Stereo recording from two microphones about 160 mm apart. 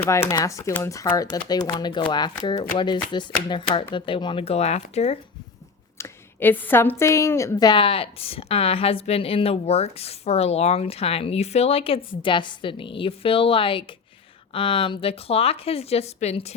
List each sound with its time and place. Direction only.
0.0 s a woman's voice: 15° left (ahead or behind); by 5.2 s 40° left (ahead or behind)
6.0 s a woman's voice: 10° left (ahead or behind); by 16.6 s 40° left (ahead or behind)